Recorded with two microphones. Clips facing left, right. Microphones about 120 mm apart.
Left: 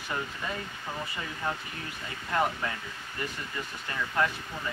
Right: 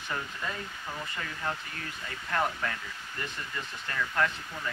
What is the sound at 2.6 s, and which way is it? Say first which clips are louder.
Speech: even; 20° left (ahead or behind).